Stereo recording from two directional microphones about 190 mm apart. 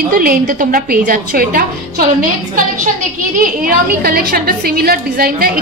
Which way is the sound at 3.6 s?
50° right (ahead or behind).